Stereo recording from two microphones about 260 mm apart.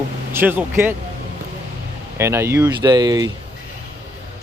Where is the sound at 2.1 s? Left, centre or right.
Centre.